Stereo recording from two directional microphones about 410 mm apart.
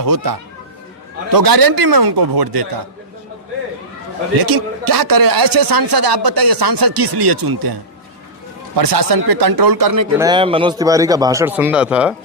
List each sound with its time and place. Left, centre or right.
0.0 s speech: right
4.4 s speech: right
10.2 s a man's voice: centre